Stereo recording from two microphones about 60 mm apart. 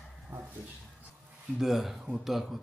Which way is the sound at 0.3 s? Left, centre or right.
Right.